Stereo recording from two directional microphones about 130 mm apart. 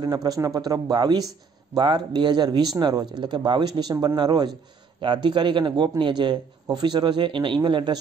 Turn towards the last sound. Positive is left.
turn(degrees=-35)  # may be behind; listen again after turning